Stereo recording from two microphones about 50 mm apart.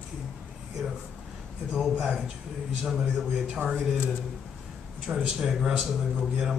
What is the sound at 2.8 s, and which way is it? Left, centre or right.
Speech, centre.